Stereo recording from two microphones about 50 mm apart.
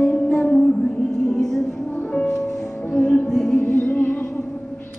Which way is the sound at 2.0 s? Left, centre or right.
Left.